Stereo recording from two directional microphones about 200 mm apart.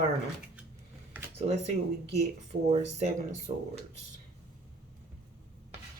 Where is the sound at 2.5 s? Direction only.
35° right (ahead or behind).